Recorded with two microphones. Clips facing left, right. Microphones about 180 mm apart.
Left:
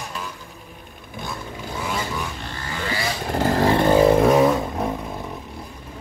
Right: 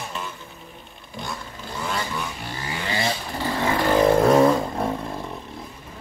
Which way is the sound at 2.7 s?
20° right (ahead or behind).